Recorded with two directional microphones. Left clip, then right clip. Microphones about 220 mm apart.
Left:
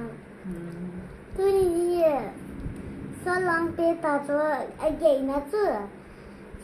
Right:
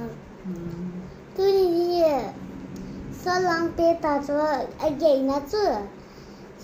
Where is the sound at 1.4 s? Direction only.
15° right (ahead or behind).